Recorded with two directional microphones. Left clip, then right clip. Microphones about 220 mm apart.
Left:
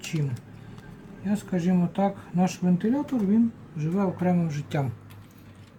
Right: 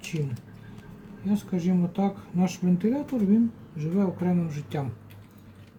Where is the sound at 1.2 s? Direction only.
25° left (ahead or behind).